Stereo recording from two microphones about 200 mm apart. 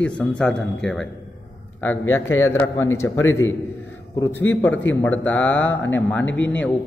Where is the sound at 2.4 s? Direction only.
15° left (ahead or behind).